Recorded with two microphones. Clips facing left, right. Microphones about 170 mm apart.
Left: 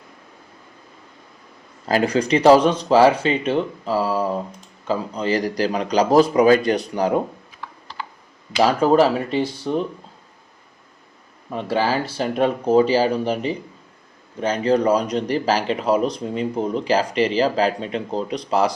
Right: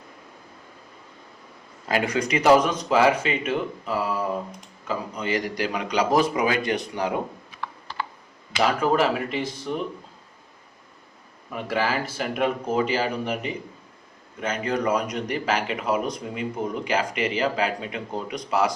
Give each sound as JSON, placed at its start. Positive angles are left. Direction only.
{"t": 1.9, "sound": "speech", "side_deg": 35}
{"t": 8.6, "sound": "speech", "side_deg": 30}
{"t": 11.5, "sound": "speech", "side_deg": 30}